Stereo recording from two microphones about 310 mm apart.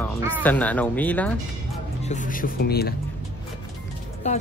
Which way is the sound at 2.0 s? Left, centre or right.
Left.